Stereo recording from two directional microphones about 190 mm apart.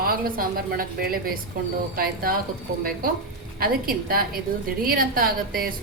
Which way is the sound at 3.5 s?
50° right (ahead or behind).